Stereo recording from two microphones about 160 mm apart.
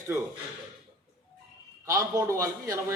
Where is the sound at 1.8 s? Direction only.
20° right (ahead or behind).